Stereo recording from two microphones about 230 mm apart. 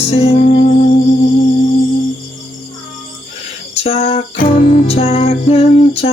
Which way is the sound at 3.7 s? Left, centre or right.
Left.